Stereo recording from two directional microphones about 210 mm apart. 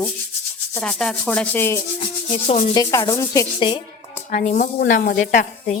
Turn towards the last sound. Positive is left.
turn(degrees=40)  # may be behind; listen again after turning